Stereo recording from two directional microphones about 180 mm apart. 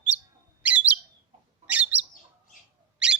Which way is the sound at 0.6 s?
10° right (ahead or behind).